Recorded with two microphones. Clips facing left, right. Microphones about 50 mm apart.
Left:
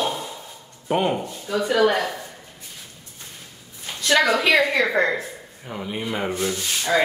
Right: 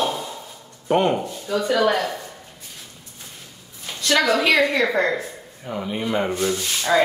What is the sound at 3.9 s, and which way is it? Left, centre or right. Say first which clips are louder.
Speech: even; centre.